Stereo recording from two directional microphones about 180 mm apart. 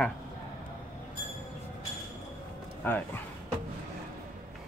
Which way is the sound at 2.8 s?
10° left (ahead or behind).